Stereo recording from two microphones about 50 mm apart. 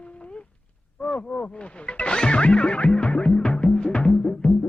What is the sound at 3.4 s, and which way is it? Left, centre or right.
Music, centre.